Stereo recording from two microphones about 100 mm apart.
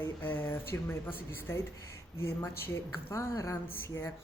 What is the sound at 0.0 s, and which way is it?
Speech, 20° left (ahead or behind).